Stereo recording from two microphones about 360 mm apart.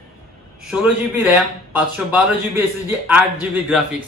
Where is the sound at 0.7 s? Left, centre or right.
Centre.